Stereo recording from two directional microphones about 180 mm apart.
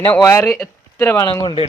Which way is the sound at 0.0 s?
15° left (ahead or behind).